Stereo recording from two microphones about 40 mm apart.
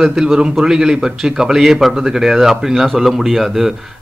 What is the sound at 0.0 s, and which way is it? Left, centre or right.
Speech, centre.